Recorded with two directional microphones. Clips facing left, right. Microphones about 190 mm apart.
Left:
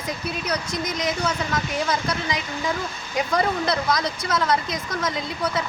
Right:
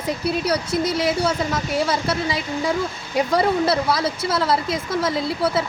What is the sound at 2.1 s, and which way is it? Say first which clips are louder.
Speech: right 4 dB; 30° right (ahead or behind).